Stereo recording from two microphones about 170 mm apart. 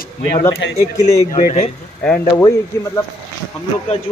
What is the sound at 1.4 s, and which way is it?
Speech, 40° left (ahead or behind).